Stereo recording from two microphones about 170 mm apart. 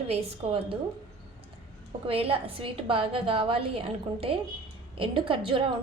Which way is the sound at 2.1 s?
35° right (ahead or behind).